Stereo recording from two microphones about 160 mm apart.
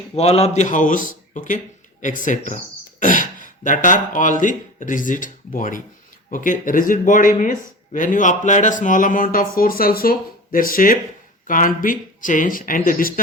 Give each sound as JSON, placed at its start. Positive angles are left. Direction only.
{"t": 0.2, "sound": "a man's voice", "side_deg": 40}